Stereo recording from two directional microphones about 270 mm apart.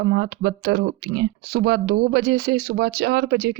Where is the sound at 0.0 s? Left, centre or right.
Right.